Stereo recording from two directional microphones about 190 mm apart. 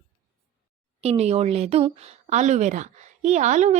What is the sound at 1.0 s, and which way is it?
Speech, 35° right (ahead or behind).